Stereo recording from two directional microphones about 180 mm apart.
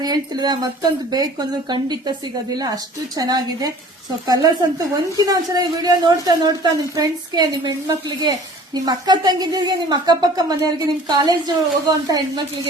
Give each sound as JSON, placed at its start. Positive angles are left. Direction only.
{"t": 0.0, "sound": "a woman's voice", "side_deg": -20}